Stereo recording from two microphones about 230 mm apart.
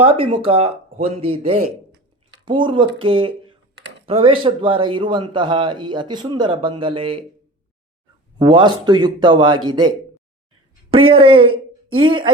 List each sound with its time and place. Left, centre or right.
0.0 s a man's voice: right
8.4 s a man's voice: right
10.9 s a woman's voice: right